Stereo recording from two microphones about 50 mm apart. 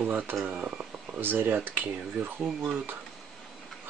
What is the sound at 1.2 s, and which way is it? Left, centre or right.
Speech, right.